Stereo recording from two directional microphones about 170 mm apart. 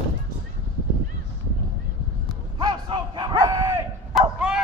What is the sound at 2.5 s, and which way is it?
Dog, 25° right (ahead or behind).